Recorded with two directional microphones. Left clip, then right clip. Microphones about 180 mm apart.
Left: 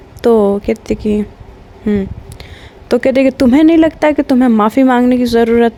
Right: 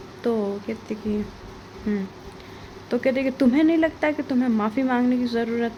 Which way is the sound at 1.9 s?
55° left (ahead or behind).